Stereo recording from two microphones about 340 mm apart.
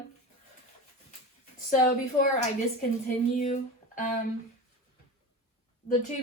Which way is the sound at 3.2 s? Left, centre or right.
Left.